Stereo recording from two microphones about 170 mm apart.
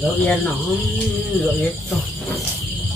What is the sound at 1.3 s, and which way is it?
Speech, centre (ahead or behind).